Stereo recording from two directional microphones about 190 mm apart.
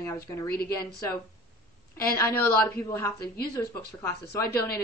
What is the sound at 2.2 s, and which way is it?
Speech, 15° left (ahead or behind).